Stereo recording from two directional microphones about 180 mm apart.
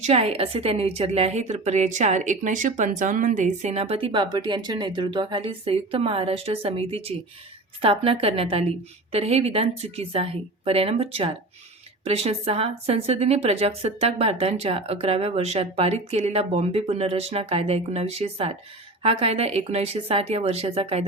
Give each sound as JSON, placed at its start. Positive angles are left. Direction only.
{"t": 0.0, "sound": "a woman's voice", "side_deg": -35}